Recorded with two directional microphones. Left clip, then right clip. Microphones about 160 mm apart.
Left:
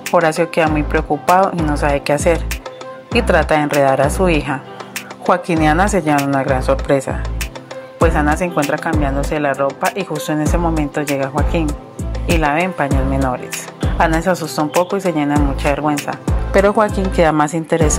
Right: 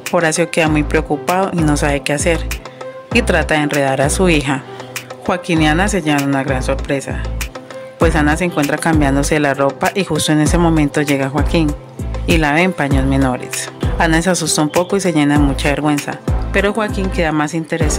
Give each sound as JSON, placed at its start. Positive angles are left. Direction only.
{"t": 0.1, "sound": "speech", "side_deg": -25}
{"t": 1.2, "sound": "speech", "side_deg": -15}
{"t": 1.7, "sound": "speech", "side_deg": -35}
{"t": 2.0, "sound": "speech", "side_deg": -20}
{"t": 4.0, "sound": "speech", "side_deg": -30}
{"t": 5.2, "sound": "speech", "side_deg": -10}
{"t": 8.0, "sound": "speech", "side_deg": -30}
{"t": 16.5, "sound": "speech", "side_deg": -5}